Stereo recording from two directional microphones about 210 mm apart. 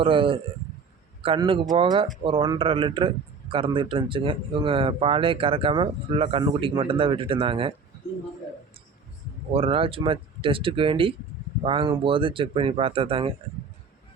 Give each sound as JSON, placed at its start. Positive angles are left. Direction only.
{"t": 0.0, "sound": "a man's voice", "side_deg": -25}
{"t": 9.5, "sound": "a man's voice", "side_deg": -25}